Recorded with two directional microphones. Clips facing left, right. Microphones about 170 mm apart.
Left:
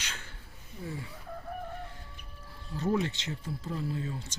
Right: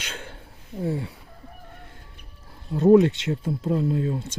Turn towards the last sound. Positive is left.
turn(degrees=-55)  # may be behind; listen again after turning